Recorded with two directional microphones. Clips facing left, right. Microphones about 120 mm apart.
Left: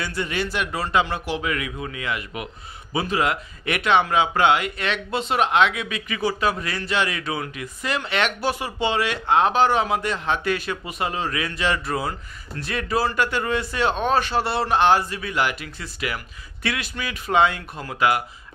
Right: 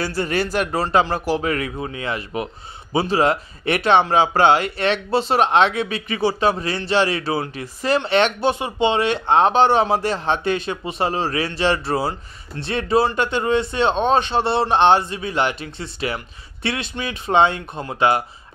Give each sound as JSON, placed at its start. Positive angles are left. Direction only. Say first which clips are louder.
{"t": 0.0, "sound": "a man's voice", "louder": "right 5 dB", "side_deg": -40}